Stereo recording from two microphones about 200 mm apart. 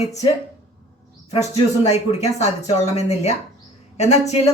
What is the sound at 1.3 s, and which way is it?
A woman's voice, 30° left (ahead or behind).